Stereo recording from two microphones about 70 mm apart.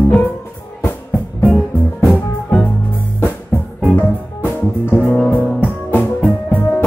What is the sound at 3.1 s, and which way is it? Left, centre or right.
Music, left.